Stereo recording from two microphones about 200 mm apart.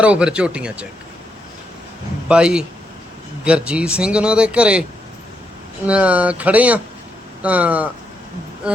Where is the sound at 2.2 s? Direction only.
5° right (ahead or behind).